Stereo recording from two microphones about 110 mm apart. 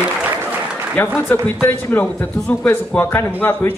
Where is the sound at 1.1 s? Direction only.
10° left (ahead or behind).